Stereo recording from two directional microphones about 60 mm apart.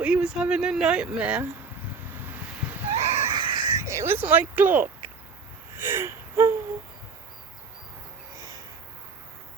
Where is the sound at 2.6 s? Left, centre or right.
Centre.